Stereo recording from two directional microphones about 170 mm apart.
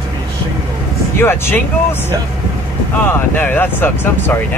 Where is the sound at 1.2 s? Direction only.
15° left (ahead or behind).